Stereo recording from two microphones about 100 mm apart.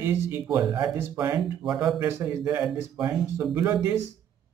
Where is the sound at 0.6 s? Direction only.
45° right (ahead or behind).